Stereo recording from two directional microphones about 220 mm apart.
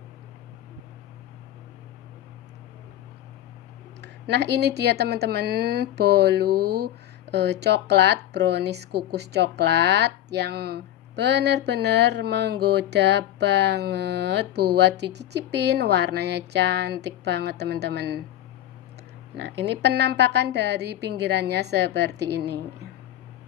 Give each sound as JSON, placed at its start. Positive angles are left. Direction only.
{"t": 4.0, "sound": "speech", "side_deg": -50}
{"t": 19.4, "sound": "speech", "side_deg": -50}